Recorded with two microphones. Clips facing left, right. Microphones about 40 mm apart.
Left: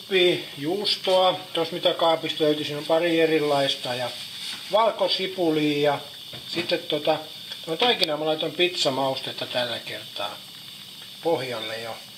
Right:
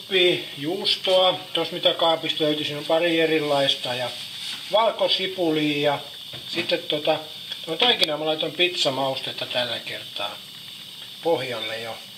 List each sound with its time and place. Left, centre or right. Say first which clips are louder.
0.1 s speech: even; centre
11.3 s speech: right 1 dB; centre